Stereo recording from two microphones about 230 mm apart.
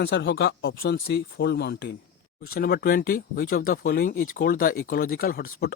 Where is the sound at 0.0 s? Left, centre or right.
Left.